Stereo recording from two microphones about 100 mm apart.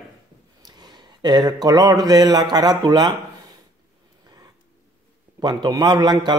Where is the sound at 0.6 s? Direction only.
45° right (ahead or behind).